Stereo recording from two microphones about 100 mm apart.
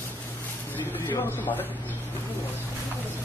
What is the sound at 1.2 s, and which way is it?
Speech, 20° left (ahead or behind).